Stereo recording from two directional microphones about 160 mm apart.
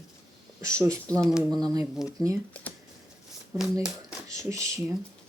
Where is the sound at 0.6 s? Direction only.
20° right (ahead or behind).